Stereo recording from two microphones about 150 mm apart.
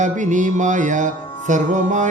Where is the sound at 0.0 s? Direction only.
55° right (ahead or behind).